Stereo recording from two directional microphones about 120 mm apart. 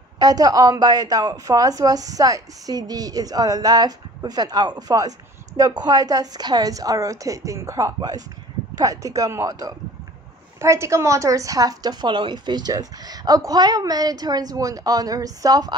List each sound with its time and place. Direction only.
0.2 s a woman's voice: 30° right (ahead or behind)